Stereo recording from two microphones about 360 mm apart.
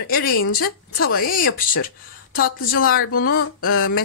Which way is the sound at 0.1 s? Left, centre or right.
Left.